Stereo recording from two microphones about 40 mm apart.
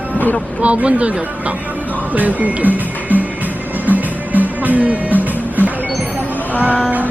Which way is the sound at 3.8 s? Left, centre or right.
Right.